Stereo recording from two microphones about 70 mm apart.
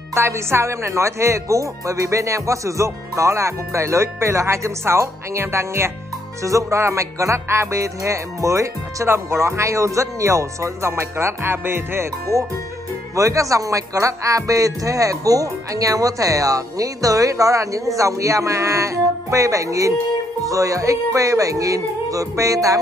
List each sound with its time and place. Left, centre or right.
0.1 s a man's voice: right